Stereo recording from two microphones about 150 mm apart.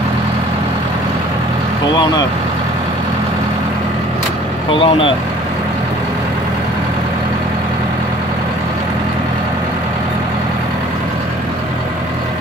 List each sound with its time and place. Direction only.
4.6 s speech: 35° left (ahead or behind)